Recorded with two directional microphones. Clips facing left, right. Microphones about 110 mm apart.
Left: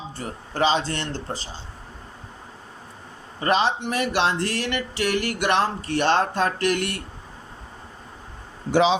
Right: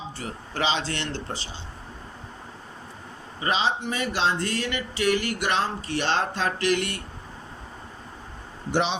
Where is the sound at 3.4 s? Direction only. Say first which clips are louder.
Left 4 dB; 55° left (ahead or behind).